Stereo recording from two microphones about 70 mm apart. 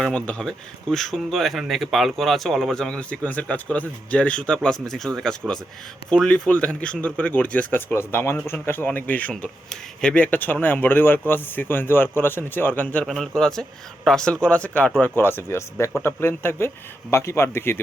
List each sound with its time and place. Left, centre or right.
0.1 s speech: centre
13.1 s speech: centre
15.1 s speech: left